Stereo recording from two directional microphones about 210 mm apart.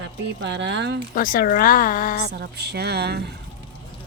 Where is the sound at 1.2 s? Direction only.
40° left (ahead or behind).